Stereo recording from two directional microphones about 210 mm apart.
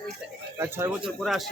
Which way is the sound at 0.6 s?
15° right (ahead or behind).